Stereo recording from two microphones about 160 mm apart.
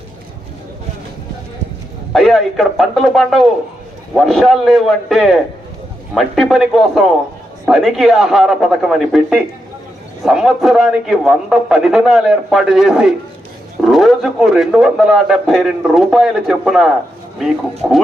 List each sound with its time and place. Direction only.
2.1 s a man's voice: centre (ahead or behind)